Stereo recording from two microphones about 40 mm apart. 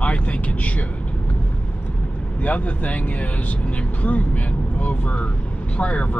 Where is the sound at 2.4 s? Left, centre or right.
Left.